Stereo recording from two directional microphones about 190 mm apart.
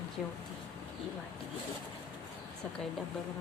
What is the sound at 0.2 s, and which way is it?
Speech, centre (ahead or behind).